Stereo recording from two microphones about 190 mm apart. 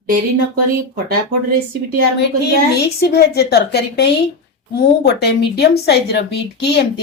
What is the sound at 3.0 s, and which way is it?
Speech, 55° left (ahead or behind).